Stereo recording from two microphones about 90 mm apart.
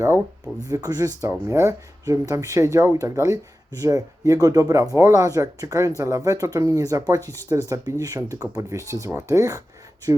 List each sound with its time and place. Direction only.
0.6 s speech: 45° right (ahead or behind)